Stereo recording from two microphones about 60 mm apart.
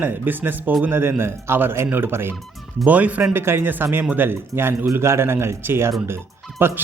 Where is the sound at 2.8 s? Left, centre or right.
Right.